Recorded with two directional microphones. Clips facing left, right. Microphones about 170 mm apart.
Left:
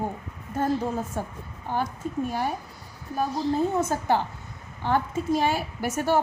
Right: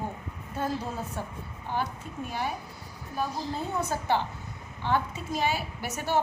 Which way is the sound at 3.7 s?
45° left (ahead or behind).